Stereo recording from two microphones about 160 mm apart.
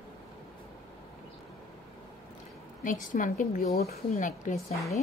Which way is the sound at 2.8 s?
55° left (ahead or behind).